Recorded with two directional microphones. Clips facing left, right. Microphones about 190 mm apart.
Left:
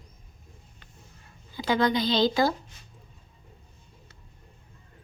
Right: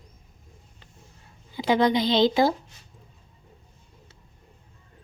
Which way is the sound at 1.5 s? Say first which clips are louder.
Right 3 dB; 25° right (ahead or behind).